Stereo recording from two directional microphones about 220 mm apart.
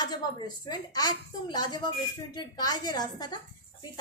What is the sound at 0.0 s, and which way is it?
A woman's voice, 20° left (ahead or behind).